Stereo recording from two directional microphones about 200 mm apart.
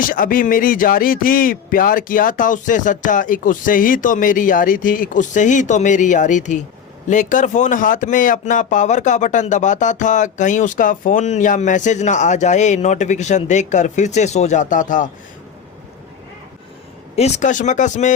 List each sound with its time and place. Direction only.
0.1 s speech: 45° left (ahead or behind)
17.2 s speech: 35° left (ahead or behind)